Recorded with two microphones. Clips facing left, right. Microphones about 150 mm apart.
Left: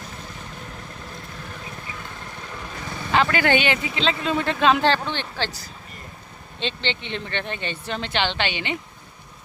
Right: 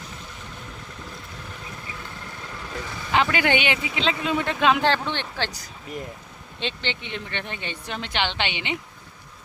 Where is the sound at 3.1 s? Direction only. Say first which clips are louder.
Left 2 dB; 15° right (ahead or behind).